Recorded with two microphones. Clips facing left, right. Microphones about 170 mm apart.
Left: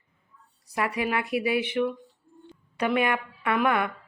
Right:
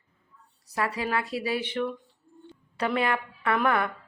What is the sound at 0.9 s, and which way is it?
Speech, 20° left (ahead or behind).